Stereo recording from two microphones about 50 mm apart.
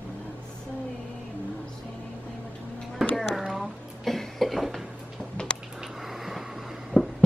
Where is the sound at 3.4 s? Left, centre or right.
Centre.